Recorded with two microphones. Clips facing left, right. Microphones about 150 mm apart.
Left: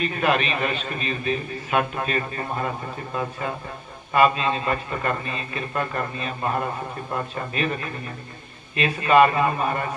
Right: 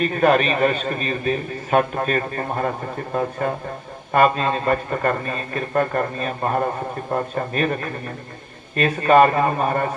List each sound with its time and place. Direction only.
0.0 s a man's voice: 40° right (ahead or behind)